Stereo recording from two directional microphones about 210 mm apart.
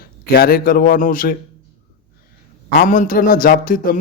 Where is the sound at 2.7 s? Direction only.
45° left (ahead or behind).